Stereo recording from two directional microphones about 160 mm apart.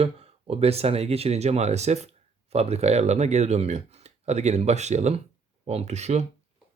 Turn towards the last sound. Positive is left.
turn(degrees=-45)  # may be behind; listen again after turning